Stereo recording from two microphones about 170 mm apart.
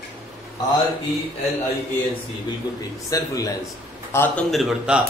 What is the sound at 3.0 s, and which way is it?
A man's voice, 20° left (ahead or behind).